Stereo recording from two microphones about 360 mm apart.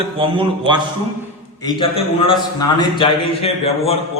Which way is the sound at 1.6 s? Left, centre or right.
Centre.